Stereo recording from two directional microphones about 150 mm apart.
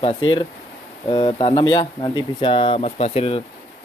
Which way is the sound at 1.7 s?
30° left (ahead or behind).